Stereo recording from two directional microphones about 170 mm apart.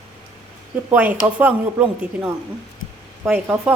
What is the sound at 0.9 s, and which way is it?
A man's voice, 10° right (ahead or behind).